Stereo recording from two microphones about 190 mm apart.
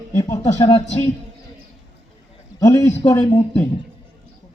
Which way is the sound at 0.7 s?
30° left (ahead or behind).